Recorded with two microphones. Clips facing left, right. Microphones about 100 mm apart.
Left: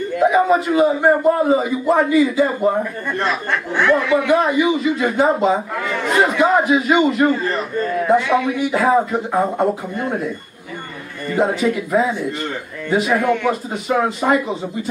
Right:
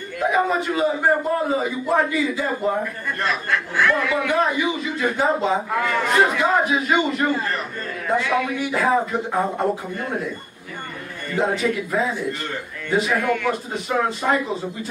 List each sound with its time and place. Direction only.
0.2 s a man's voice: 5° left (ahead or behind)
3.7 s speech: 25° left (ahead or behind)
4.3 s speech: 5° left (ahead or behind)
8.5 s speech: 5° left (ahead or behind)
11.3 s speech: 5° left (ahead or behind)